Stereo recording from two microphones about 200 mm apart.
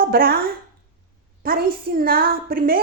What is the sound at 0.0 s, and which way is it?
A woman's voice, 50° right (ahead or behind).